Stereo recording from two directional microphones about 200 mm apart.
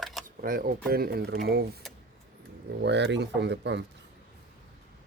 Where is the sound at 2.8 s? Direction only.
60° right (ahead or behind).